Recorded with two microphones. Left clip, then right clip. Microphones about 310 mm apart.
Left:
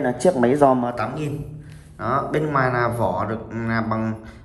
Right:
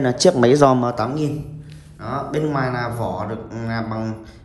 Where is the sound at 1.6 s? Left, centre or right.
Centre.